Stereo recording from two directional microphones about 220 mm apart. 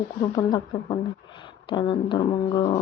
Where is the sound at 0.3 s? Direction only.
20° left (ahead or behind).